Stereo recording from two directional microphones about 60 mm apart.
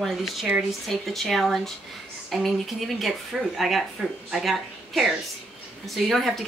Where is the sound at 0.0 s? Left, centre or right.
Centre.